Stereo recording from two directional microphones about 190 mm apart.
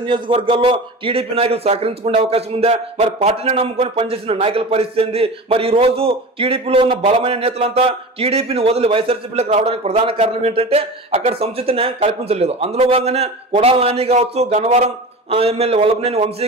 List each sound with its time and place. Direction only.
0.0 s a man's voice: 25° right (ahead or behind)